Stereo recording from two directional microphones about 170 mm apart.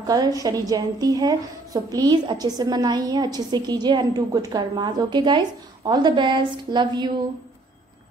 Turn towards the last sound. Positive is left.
turn(degrees=-25)  # may be behind; listen again after turning